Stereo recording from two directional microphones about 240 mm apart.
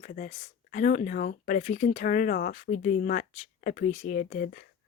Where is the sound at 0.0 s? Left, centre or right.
Left.